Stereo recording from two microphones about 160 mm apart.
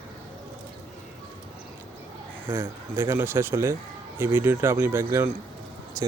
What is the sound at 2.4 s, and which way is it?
Speech, 15° right (ahead or behind).